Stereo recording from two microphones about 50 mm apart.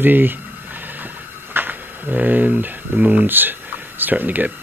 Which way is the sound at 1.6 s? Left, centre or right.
Right.